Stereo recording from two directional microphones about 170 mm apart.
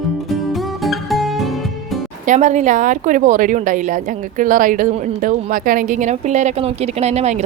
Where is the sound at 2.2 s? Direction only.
45° right (ahead or behind).